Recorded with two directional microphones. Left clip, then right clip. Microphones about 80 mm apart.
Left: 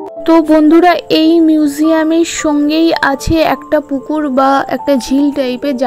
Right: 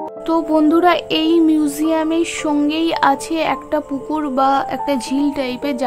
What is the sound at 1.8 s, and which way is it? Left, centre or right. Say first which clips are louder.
Speech: left 6 dB; left.